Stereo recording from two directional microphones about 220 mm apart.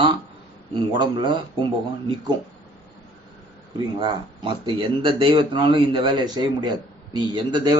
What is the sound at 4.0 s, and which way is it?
Speech, 20° right (ahead or behind).